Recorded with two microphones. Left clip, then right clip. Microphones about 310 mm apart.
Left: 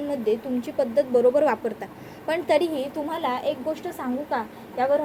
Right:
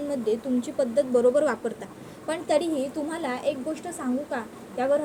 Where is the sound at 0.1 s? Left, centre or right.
Left.